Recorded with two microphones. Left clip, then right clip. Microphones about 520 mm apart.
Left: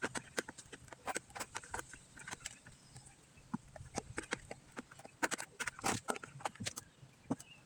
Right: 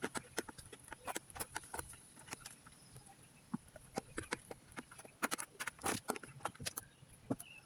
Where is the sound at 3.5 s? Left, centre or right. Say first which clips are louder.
Left 2 dB; right.